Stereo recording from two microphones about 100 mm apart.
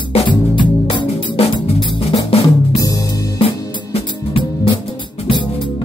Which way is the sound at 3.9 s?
65° left (ahead or behind).